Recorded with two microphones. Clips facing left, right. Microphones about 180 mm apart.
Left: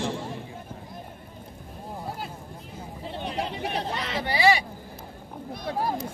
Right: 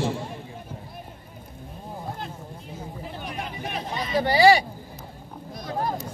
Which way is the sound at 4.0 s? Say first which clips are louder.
Right 6 dB; 80° left.